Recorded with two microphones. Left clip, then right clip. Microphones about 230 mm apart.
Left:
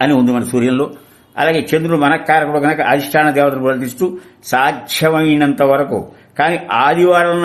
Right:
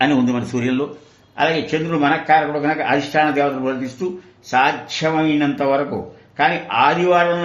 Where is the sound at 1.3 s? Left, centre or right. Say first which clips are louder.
Left 5 dB; left.